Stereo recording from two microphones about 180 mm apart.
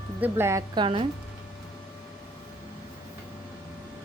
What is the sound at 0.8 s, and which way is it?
Speech, 30° right (ahead or behind).